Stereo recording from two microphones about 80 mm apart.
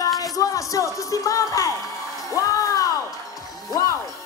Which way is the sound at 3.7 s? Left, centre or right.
Left.